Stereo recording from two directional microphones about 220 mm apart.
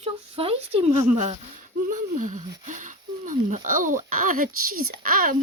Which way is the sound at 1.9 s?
35° right (ahead or behind).